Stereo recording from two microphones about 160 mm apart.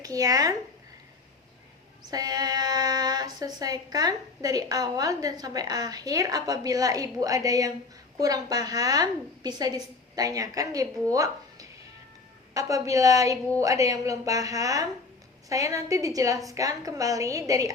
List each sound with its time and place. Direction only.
0.0 s speech: 20° right (ahead or behind)
2.0 s speech: 25° right (ahead or behind)
12.5 s speech: 20° right (ahead or behind)